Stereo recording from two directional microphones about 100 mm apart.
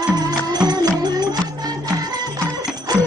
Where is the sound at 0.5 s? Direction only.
40° right (ahead or behind).